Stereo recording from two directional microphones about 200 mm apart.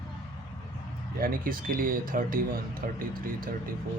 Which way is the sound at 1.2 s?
45° right (ahead or behind).